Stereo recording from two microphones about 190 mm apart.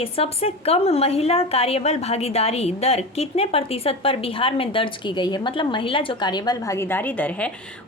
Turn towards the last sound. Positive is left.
turn(degrees=5)  # may be behind; listen again after turning